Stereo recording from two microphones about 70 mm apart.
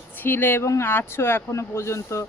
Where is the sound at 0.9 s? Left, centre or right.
Left.